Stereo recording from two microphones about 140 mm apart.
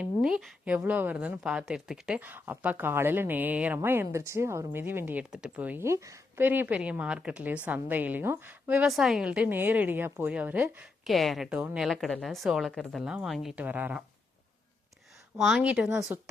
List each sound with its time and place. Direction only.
0.0 s speech: 5° right (ahead or behind)
11.0 s a woman's voice: centre (ahead or behind)
15.4 s speech: 5° right (ahead or behind)